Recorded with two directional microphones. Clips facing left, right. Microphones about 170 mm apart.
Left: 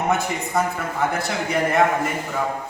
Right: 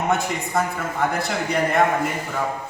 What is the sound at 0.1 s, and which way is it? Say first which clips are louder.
A man's voice: even; centre (ahead or behind).